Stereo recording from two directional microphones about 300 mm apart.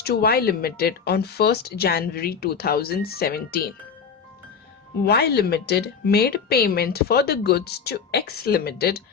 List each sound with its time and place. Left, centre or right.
0.0 s speech: left
5.0 s speech: left